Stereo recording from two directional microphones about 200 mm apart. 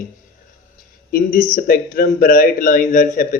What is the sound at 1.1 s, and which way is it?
Speech, 45° left (ahead or behind).